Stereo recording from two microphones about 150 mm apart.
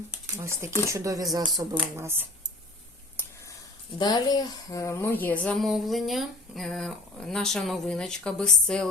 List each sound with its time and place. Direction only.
0.3 s speech: 20° right (ahead or behind)
2.0 s speech: 15° right (ahead or behind)
3.9 s speech: 25° left (ahead or behind); by 8.9 s 5° left (ahead or behind)